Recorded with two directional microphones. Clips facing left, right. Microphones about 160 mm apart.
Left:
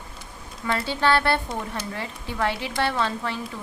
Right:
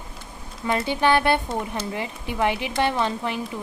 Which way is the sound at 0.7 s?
15° right (ahead or behind).